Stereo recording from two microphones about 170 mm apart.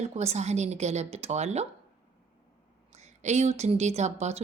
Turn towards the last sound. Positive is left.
turn(degrees=-40)  # may be behind; listen again after turning